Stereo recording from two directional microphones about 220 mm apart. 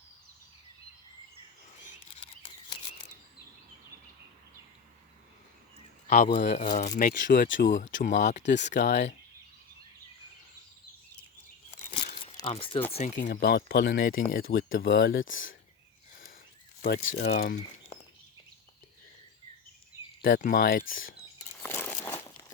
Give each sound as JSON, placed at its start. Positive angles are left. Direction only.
{"t": 1.9, "sound": "camera", "side_deg": 25}
{"t": 6.1, "sound": "speech", "side_deg": 35}
{"t": 12.0, "sound": "crumpling", "side_deg": 30}
{"t": 12.4, "sound": "speech", "side_deg": 25}
{"t": 13.2, "sound": "speech", "side_deg": 45}
{"t": 14.8, "sound": "speech", "side_deg": 60}
{"t": 17.0, "sound": "speech", "side_deg": 55}
{"t": 20.2, "sound": "speech", "side_deg": 40}
{"t": 21.6, "sound": "a sound", "side_deg": 10}